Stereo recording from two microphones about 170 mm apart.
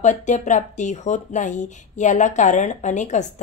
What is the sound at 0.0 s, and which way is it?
Speech, 45° left (ahead or behind).